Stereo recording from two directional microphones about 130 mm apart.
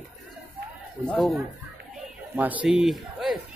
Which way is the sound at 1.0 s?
10° left (ahead or behind).